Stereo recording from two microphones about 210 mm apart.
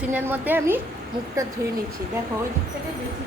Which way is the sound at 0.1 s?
10° right (ahead or behind).